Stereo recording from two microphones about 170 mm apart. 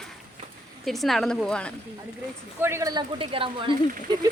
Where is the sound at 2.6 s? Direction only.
20° right (ahead or behind).